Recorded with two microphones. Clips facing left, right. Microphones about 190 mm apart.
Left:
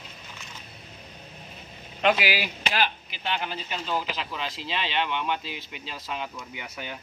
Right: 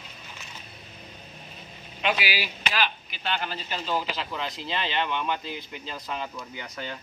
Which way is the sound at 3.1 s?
20° left (ahead or behind).